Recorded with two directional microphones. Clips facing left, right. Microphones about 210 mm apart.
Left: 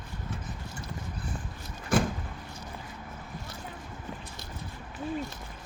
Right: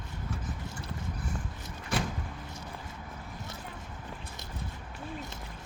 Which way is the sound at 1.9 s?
50° left (ahead or behind).